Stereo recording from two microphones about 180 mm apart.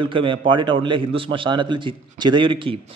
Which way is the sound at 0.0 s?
30° right (ahead or behind).